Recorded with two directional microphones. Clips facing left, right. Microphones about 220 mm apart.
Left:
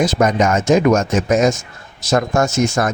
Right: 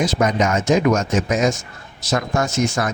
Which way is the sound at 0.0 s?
45° left (ahead or behind).